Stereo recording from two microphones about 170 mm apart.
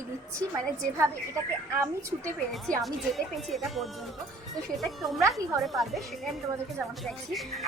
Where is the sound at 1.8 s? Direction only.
15° right (ahead or behind).